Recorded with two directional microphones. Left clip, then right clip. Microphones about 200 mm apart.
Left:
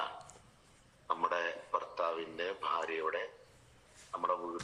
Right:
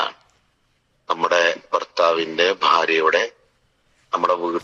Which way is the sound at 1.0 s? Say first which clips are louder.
Right 16 dB; 55° right (ahead or behind).